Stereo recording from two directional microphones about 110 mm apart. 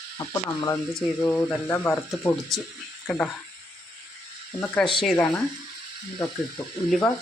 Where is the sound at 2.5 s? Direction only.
Centre (ahead or behind).